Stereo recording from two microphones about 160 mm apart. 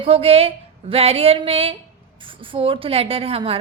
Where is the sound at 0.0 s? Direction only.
35° right (ahead or behind).